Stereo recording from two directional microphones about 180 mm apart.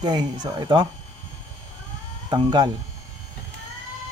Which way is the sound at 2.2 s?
25° right (ahead or behind).